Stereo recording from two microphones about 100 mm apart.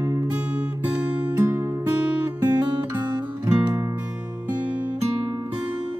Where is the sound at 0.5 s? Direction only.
15° right (ahead or behind).